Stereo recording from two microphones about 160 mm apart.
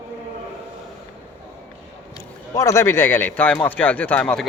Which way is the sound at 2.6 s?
20° left (ahead or behind).